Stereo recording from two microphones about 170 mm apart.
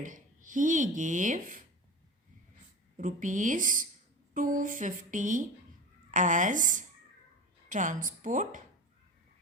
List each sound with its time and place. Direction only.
0.0 s speech: 50° right (ahead or behind)
3.0 s speech: 50° right (ahead or behind)